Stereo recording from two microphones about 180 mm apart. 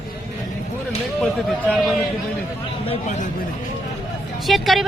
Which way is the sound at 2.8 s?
35° left (ahead or behind).